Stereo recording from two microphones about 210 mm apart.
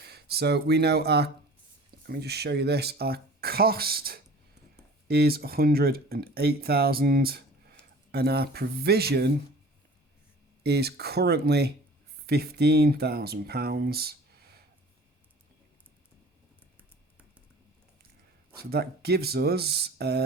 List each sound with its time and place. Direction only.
0.0 s speech: 50° right (ahead or behind)
10.6 s speech: 50° right (ahead or behind)
18.5 s speech: 50° right (ahead or behind)